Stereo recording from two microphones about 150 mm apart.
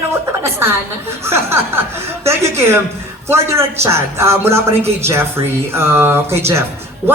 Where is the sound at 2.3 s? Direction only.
15° right (ahead or behind).